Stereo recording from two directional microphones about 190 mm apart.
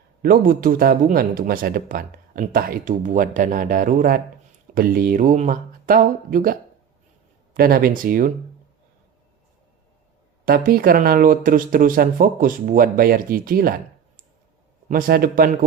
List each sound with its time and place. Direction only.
0.2 s speech: 50° right (ahead or behind)
10.4 s speech: 50° right (ahead or behind)
14.8 s speech: 50° right (ahead or behind)